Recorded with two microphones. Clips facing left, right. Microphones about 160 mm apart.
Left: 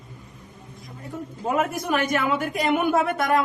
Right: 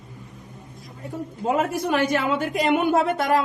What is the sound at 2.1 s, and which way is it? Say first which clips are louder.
A woman's voice: right 1 dB; 30° right (ahead or behind).